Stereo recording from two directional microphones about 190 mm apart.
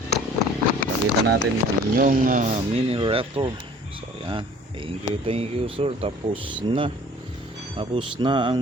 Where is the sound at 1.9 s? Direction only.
45° right (ahead or behind).